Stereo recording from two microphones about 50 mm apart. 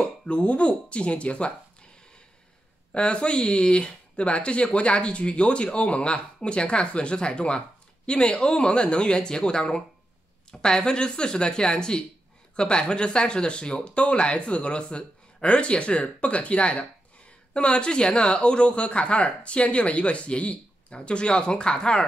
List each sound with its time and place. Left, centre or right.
0.3 s speech: left
2.9 s speech: centre